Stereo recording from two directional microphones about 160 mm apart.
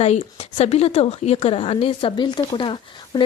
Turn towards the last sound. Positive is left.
turn(degrees=30)  # may be behind; listen again after turning